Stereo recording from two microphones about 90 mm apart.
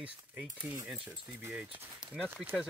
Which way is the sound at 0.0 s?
15° right (ahead or behind).